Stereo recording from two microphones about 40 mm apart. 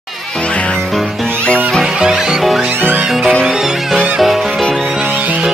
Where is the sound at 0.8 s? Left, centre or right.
Centre.